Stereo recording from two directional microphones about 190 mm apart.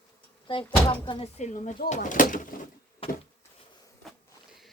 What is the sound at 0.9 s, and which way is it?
Speech, 25° left (ahead or behind).